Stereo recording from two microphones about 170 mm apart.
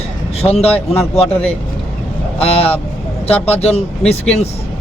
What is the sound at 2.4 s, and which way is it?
A man's voice, 35° left (ahead or behind).